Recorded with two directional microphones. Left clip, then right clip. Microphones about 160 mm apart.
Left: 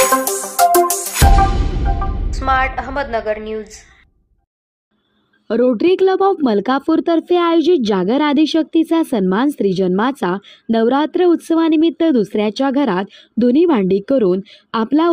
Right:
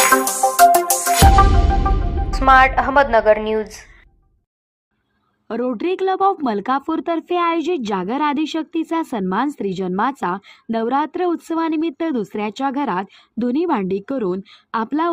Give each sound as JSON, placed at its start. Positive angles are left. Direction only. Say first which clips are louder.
{"t": 0.1, "sound": "music", "louder": "right 2 dB", "side_deg": 0}
{"t": 2.3, "sound": "a woman's voice", "louder": "right 5 dB", "side_deg": -15}
{"t": 5.5, "sound": "speech", "louder": "left 8 dB", "side_deg": 30}